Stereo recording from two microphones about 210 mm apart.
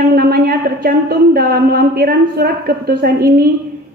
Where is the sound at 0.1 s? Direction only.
45° right (ahead or behind).